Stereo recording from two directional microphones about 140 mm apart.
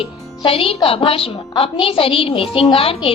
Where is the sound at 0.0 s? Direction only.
40° left (ahead or behind).